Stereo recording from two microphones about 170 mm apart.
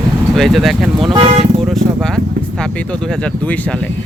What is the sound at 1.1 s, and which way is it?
Speech, 35° right (ahead or behind).